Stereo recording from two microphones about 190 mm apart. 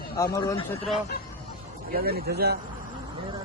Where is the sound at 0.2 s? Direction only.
15° left (ahead or behind).